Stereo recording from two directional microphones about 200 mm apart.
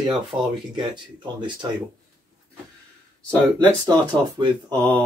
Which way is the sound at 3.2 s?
15° right (ahead or behind).